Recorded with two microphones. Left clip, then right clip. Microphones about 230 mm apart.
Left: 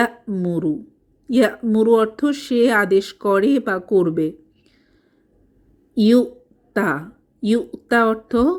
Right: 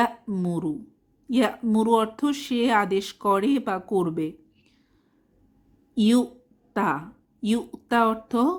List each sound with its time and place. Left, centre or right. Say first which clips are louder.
0.0 s speech: left 4 dB; centre
5.9 s a woman's voice: left 7 dB; centre